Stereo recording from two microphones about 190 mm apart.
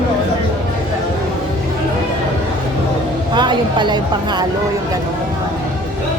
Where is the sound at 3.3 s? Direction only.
25° right (ahead or behind).